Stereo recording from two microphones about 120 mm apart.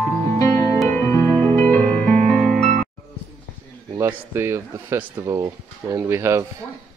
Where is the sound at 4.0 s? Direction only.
20° right (ahead or behind).